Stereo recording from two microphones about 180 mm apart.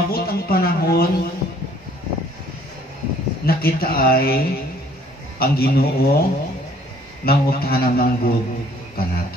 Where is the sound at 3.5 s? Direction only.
55° left (ahead or behind).